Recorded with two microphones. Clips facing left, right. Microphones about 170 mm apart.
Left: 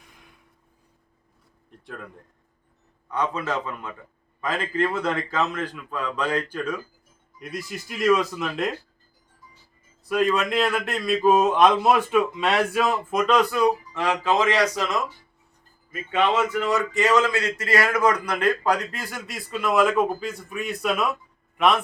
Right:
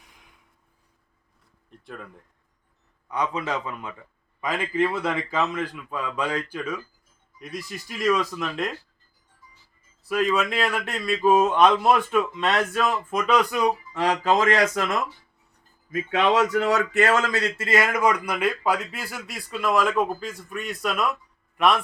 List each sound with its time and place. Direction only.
3.1 s a man's voice: 15° right (ahead or behind)
7.3 s a man's voice: centre (ahead or behind)
10.1 s a man's voice: 5° right (ahead or behind)
14.0 s a man's voice: 40° right (ahead or behind)
15.9 s speech: 90° right; by 17.2 s 60° right (ahead or behind)
17.3 s a man's voice: 30° right (ahead or behind); by 21.2 s centre (ahead or behind)